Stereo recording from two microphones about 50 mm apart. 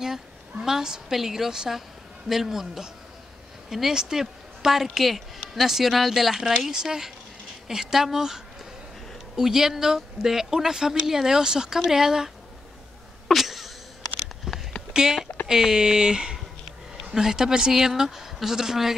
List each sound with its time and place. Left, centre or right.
0.0 s a woman's voice: centre
9.4 s speech: centre
13.3 s a sound: centre
14.9 s speech: centre